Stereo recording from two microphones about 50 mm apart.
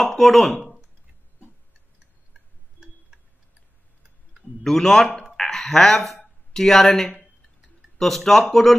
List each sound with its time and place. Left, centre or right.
0.2 s speech: centre
3.1 s tick-tock: centre
4.6 s speech: centre